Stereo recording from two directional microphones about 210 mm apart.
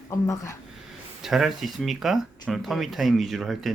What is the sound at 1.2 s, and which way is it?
Speech, centre (ahead or behind).